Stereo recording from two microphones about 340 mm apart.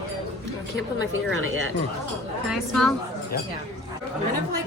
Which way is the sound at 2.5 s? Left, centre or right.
Centre.